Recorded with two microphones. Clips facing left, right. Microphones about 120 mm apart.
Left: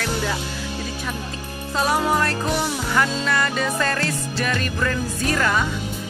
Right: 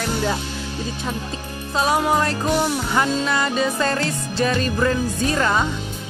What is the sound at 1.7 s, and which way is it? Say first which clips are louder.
Speech: right 1 dB; 20° right (ahead or behind).